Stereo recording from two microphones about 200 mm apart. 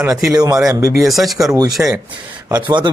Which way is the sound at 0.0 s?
15° right (ahead or behind).